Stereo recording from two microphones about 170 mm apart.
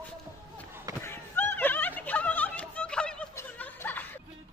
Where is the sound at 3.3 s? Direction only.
10° left (ahead or behind).